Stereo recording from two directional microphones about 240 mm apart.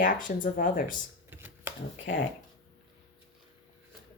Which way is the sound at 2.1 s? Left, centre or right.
Left.